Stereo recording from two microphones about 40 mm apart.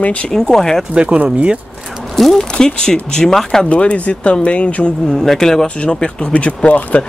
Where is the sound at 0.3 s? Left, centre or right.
Centre.